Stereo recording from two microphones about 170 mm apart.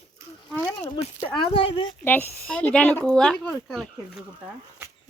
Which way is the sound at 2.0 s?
10° left (ahead or behind).